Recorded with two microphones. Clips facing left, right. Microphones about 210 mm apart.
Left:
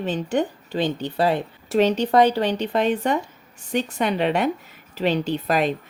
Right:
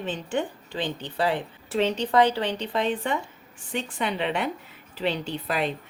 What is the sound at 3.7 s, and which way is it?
Speech, 40° left (ahead or behind).